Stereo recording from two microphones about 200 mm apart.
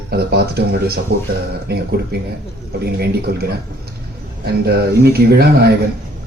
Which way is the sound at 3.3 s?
50° right (ahead or behind).